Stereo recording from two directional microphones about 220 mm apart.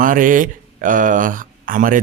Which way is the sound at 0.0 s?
35° right (ahead or behind).